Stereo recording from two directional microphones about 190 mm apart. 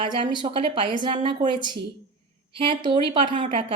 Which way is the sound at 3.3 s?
40° right (ahead or behind).